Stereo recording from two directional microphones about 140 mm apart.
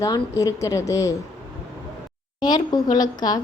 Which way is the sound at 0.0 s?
25° left (ahead or behind).